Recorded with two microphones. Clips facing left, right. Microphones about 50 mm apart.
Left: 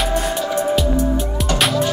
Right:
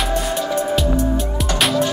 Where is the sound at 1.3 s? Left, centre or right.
Centre.